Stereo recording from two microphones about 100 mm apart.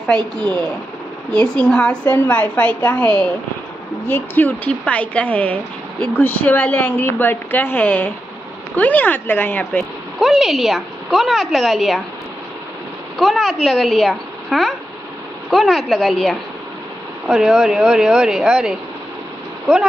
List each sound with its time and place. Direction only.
0.0 s speech: 10° left (ahead or behind)
10.2 s a woman's voice: centre (ahead or behind)
13.2 s a woman's voice: centre (ahead or behind)